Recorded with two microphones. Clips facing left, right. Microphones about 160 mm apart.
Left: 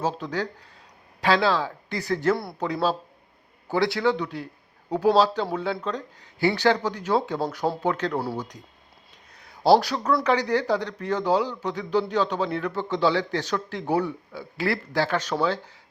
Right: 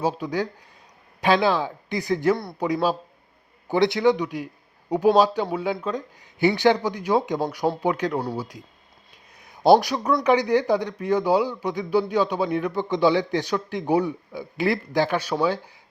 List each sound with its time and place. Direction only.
0.0 s speech: 10° right (ahead or behind)
2.3 s speech: centre (ahead or behind)
2.6 s speech: 10° right (ahead or behind)
9.3 s a sound: 15° right (ahead or behind)
10.2 s speech: 15° right (ahead or behind)